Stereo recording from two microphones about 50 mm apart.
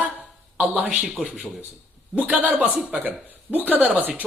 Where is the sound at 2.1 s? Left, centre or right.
Right.